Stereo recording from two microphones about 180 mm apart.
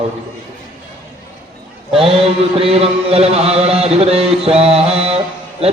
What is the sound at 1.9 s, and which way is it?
Chant, 30° right (ahead or behind).